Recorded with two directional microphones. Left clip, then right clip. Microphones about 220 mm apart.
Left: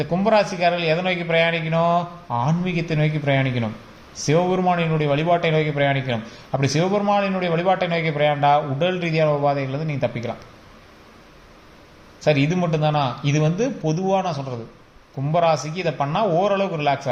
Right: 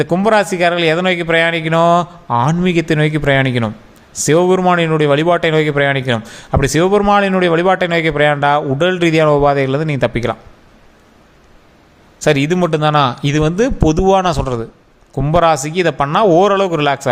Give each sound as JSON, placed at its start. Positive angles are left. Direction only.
{"t": 0.0, "sound": "speech", "side_deg": -50}
{"t": 12.2, "sound": "speech", "side_deg": -50}